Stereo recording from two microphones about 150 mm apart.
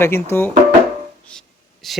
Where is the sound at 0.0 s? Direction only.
15° left (ahead or behind).